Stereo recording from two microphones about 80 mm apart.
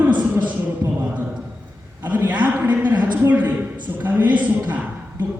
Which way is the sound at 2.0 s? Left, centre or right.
Right.